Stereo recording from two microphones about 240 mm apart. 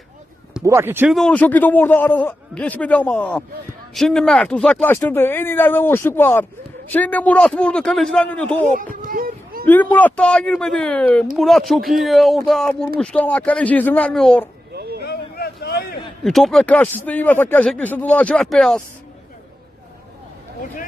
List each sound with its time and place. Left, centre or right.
0.5 s a man's voice: centre
8.7 s a sound: right
9.6 s a man's voice: centre
14.7 s chop: right
15.0 s a sound: left
16.2 s a man's voice: centre